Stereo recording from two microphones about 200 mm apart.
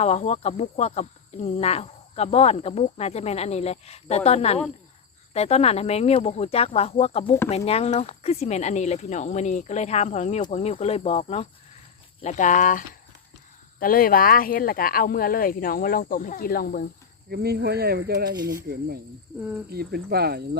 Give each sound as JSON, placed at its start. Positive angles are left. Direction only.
{"t": 0.0, "sound": "speech", "side_deg": 35}
{"t": 17.2, "sound": "speech", "side_deg": -50}
{"t": 19.4, "sound": "speech", "side_deg": -10}
{"t": 19.7, "sound": "speech", "side_deg": -50}